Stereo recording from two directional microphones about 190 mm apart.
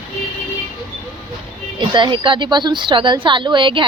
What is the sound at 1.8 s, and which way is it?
Speech, 25° right (ahead or behind).